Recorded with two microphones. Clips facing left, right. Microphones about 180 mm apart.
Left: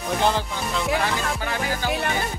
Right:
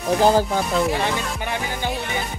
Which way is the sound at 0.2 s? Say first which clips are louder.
Right 7 dB; 40° right (ahead or behind).